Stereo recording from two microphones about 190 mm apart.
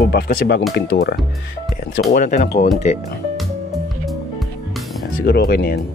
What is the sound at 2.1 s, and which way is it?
Speech, 40° left (ahead or behind).